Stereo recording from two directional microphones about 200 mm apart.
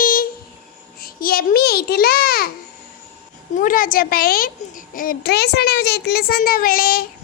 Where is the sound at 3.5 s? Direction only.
45° left (ahead or behind).